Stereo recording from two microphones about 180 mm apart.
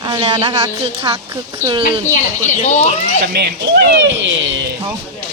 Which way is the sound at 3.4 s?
70° right (ahead or behind).